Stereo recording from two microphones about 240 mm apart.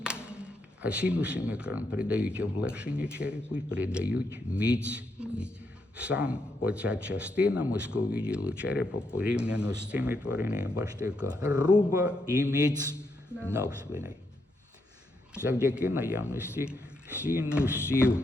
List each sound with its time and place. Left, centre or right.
0.0 s speech: centre
13.6 s speech: centre
15.7 s speech: centre
17.6 s speech: centre